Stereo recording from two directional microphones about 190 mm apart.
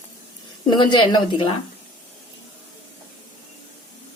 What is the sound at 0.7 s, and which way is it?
Speech, 25° left (ahead or behind).